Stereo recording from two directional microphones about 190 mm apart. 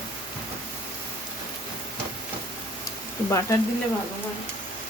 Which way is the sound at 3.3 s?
15° left (ahead or behind).